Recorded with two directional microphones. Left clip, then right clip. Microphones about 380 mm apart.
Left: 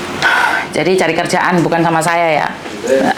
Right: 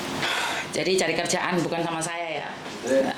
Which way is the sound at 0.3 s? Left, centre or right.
Centre.